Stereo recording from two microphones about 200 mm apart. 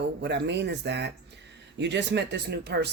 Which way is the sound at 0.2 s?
60° right (ahead or behind).